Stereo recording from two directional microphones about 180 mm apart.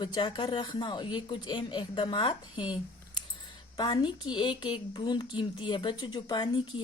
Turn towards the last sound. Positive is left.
turn(degrees=25)  # may be behind; listen again after turning